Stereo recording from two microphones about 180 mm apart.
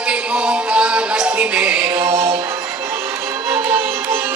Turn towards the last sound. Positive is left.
turn(degrees=-15)  # may be behind; listen again after turning